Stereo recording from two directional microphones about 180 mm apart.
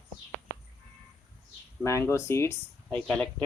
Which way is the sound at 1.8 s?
15° left (ahead or behind).